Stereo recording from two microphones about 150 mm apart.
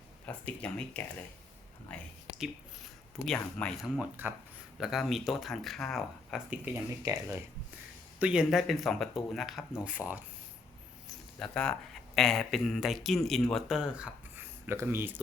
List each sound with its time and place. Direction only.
0.3 s speech: 10° left (ahead or behind)
3.2 s speech: 5° left (ahead or behind)
3.8 s speech: 5° right (ahead or behind)
7.0 s speech: 20° right (ahead or behind)
8.2 s speech: 5° right (ahead or behind)
11.3 s speech: 5° left (ahead or behind); by 15.1 s 15° right (ahead or behind)